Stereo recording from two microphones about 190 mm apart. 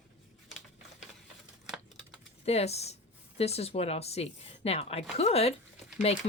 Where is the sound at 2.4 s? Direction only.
35° left (ahead or behind).